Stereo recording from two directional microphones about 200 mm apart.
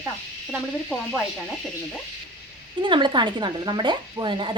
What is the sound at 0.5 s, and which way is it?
Speech, centre (ahead or behind).